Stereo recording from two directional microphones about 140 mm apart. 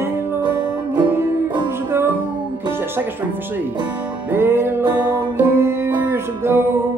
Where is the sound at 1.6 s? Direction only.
15° right (ahead or behind).